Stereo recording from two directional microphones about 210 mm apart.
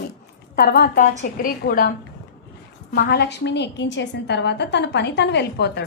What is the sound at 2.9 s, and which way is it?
A woman's voice, 50° left (ahead or behind).